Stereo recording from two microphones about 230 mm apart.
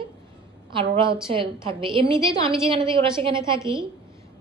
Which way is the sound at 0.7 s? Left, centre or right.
Right.